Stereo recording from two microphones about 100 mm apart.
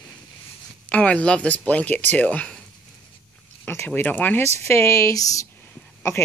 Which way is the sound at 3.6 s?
20° left (ahead or behind).